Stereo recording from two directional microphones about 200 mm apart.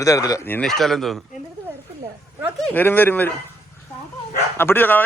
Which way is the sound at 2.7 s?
10° left (ahead or behind).